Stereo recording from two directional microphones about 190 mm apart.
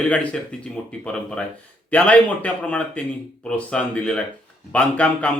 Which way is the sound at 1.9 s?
5° left (ahead or behind).